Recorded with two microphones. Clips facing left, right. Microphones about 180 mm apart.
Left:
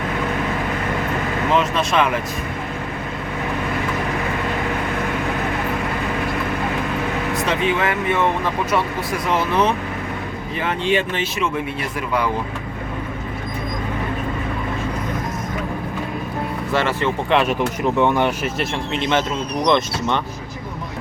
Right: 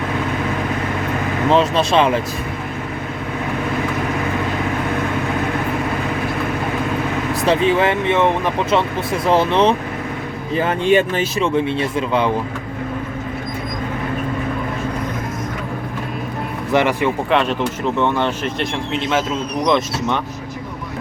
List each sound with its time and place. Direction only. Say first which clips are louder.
1.5 s speech: right 5 dB; 30° right (ahead or behind)
7.4 s speech: right 6 dB; 35° right (ahead or behind)
10.5 s speech: right 5 dB; 40° right (ahead or behind)
16.7 s speech: right 5 dB; 15° right (ahead or behind)
17.2 s speech: even; 5° left (ahead or behind)